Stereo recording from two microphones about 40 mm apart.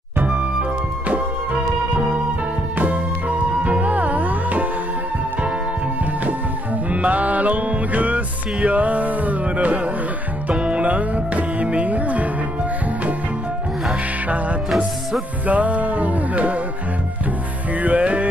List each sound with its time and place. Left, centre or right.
0.3 s music: right
6.9 s music: right
15.4 s music: right
17.8 s music: right